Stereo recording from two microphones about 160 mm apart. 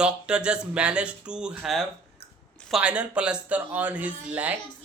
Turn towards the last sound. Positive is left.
turn(degrees=-10)  # may be behind; listen again after turning